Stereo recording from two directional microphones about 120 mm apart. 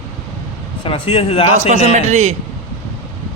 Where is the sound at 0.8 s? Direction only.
50° left (ahead or behind).